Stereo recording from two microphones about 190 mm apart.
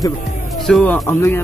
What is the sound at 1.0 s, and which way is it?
Speech, 15° left (ahead or behind).